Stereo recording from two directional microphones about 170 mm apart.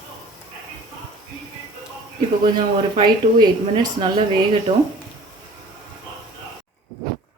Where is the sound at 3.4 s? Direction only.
25° right (ahead or behind).